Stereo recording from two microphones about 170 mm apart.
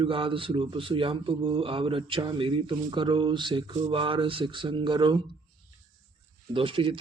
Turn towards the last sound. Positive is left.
turn(degrees=-30)  # may be behind; listen again after turning